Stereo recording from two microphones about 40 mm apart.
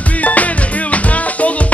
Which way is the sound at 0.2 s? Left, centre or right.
Left.